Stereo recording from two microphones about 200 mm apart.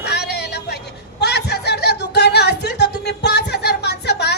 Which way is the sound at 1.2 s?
55° left (ahead or behind).